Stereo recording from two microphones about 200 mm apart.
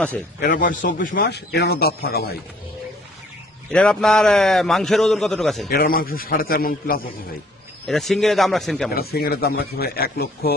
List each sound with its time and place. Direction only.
0.4 s a man's voice: 40° left (ahead or behind)
3.7 s a man's voice: 5° left (ahead or behind)
5.7 s a man's voice: 45° left (ahead or behind)
7.9 s a man's voice: centre (ahead or behind)
8.9 s a man's voice: 50° left (ahead or behind)